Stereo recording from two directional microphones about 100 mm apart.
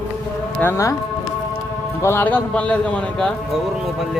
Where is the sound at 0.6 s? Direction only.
25° left (ahead or behind).